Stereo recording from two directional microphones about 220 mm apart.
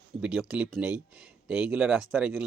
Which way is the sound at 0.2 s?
5° right (ahead or behind).